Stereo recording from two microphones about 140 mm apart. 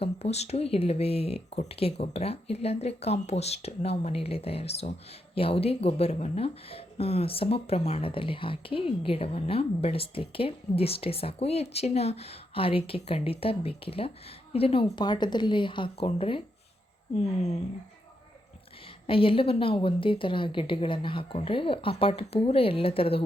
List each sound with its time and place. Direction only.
0.0 s a woman's voice: 50° left (ahead or behind)
19.0 s a woman's voice: 40° left (ahead or behind)